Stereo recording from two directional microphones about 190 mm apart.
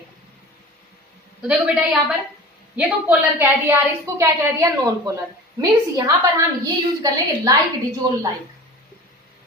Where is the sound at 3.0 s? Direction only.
10° right (ahead or behind).